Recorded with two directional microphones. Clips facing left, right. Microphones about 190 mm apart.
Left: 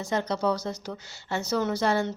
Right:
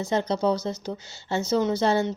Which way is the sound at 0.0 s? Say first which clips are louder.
Right 3 dB; 25° right (ahead or behind).